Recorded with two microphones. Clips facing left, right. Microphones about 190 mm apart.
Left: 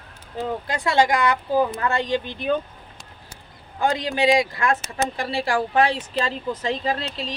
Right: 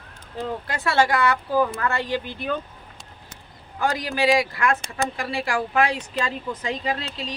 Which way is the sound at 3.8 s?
25° left (ahead or behind).